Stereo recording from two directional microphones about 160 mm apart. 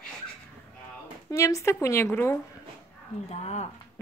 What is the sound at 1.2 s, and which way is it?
Speech, 20° left (ahead or behind).